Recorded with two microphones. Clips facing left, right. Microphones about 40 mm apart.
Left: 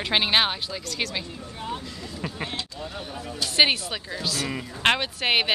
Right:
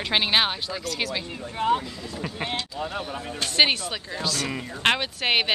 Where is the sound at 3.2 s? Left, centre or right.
Right.